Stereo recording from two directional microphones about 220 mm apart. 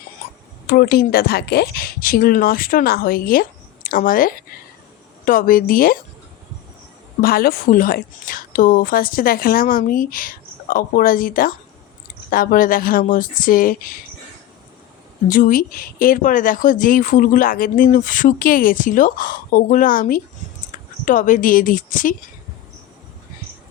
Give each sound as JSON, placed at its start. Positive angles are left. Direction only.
{"t": 0.7, "sound": "a woman's voice", "side_deg": 45}
{"t": 7.2, "sound": "speech", "side_deg": 40}
{"t": 15.3, "sound": "speech", "side_deg": 40}